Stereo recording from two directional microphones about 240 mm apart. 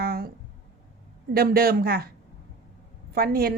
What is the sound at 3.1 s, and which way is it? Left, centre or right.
Speech, right.